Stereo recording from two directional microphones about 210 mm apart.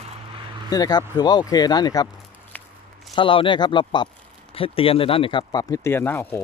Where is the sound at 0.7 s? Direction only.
20° left (ahead or behind).